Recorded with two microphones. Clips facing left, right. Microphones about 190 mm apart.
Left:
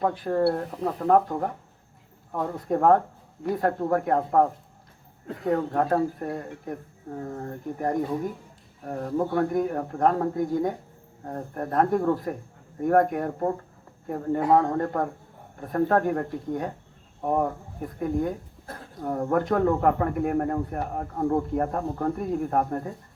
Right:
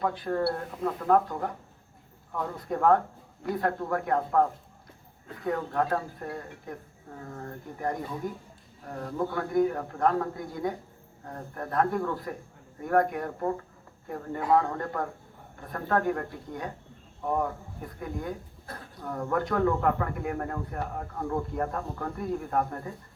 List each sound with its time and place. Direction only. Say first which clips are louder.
0.0 s speech: left 5 dB; 40° left (ahead or behind)